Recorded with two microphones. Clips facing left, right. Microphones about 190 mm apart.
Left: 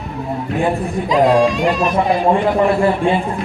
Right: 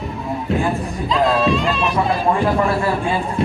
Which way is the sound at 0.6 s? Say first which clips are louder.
Left 3 dB; 20° left (ahead or behind).